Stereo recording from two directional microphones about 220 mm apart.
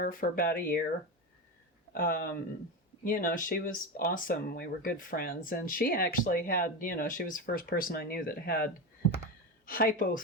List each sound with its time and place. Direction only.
0.0 s speech: 40° left (ahead or behind)
1.9 s speech: 40° left (ahead or behind)